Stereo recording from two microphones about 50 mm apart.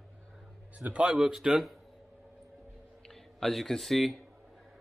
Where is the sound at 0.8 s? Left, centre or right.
Right.